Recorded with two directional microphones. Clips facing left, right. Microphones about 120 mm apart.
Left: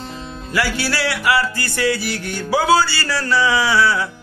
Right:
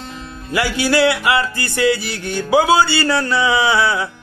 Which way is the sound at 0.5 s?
20° right (ahead or behind).